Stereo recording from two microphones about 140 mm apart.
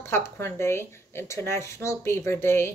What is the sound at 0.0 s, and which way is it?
Speech, 20° left (ahead or behind).